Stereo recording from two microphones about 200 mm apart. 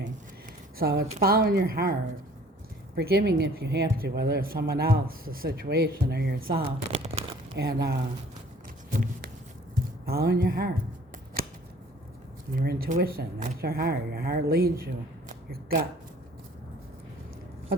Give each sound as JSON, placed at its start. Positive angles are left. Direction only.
{"t": 0.8, "sound": "speech", "side_deg": -50}
{"t": 6.6, "sound": "speech", "side_deg": -30}
{"t": 7.7, "sound": "speech", "side_deg": -55}
{"t": 10.1, "sound": "speech", "side_deg": -50}
{"t": 12.5, "sound": "speech", "side_deg": -45}